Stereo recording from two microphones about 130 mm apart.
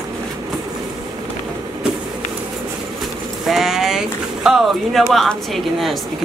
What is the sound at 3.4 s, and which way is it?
Sheep, 5° right (ahead or behind).